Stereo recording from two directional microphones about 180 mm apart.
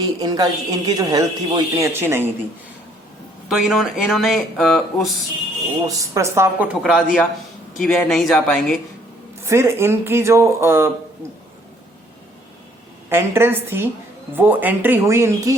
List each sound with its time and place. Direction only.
0.0 s speech: 20° right (ahead or behind)
3.5 s speech: centre (ahead or behind)
6.0 s speech: 15° right (ahead or behind)
6.8 s speech: centre (ahead or behind)
9.4 s speech: 15° right (ahead or behind)
13.1 s speech: 15° right (ahead or behind)